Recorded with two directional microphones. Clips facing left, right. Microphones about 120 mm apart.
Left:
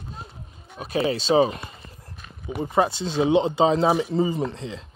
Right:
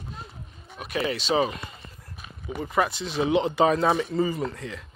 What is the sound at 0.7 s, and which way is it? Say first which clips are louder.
Speech: left 4 dB; 30° left (ahead or behind).